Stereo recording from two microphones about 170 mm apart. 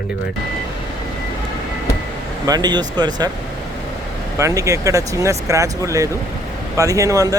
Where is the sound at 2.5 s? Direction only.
25° right (ahead or behind).